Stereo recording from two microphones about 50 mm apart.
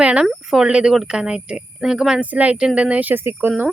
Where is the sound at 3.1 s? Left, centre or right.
Right.